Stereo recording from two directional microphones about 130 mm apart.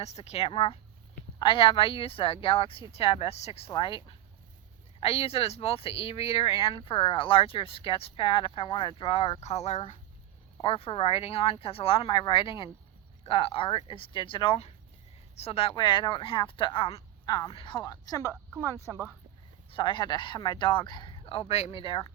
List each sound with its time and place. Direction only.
0.0 s speech: 55° left (ahead or behind)
10.6 s speech: 45° left (ahead or behind)
15.4 s speech: 50° left (ahead or behind)
17.2 s speech: 30° left (ahead or behind)
17.5 s speech: 40° left (ahead or behind)
17.9 s speech: 25° left (ahead or behind)
19.7 s speech: 40° left (ahead or behind)